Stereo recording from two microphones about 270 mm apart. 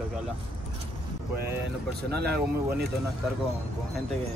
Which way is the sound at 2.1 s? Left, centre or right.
Right.